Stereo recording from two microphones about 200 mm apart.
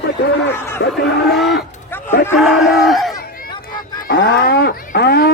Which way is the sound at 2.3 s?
Centre (ahead or behind).